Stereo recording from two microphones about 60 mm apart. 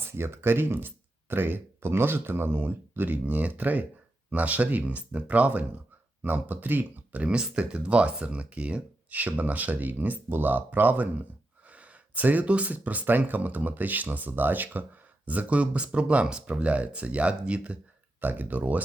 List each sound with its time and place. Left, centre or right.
0.0 s speech: right; by 17.7 s centre
18.2 s speech: right